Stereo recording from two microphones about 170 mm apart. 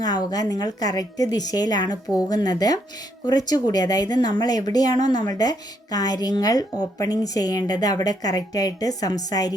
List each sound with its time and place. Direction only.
0.0 s speech: 25° left (ahead or behind)